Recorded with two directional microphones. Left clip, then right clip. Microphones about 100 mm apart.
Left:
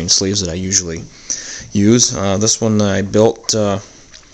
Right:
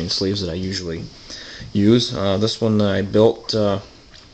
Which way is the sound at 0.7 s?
60° left (ahead or behind).